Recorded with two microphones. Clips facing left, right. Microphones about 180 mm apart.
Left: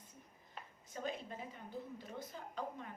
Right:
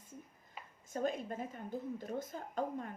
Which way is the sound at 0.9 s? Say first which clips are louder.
Right 7 dB; 50° right (ahead or behind).